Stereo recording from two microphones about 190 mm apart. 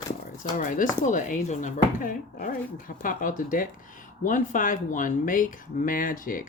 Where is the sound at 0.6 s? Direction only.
45° left (ahead or behind).